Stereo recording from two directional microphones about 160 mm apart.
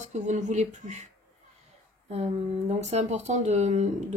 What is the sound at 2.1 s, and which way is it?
Speech, 45° right (ahead or behind).